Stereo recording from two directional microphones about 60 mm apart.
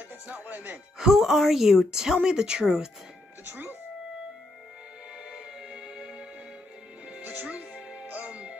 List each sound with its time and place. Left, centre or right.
0.3 s speech: right
0.9 s a woman's voice: centre
3.4 s speech: right
5.3 s music: centre
7.1 s music: right